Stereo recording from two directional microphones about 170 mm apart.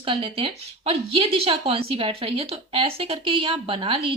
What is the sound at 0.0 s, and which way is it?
A woman's voice, 30° right (ahead or behind).